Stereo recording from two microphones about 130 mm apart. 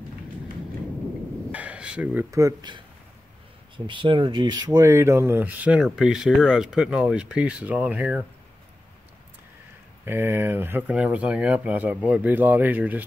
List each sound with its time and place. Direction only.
1.5 s a sound: 10° right (ahead or behind)
2.3 s speech: 30° right (ahead or behind); by 8.3 s 10° right (ahead or behind)
10.0 s speech: 15° right (ahead or behind)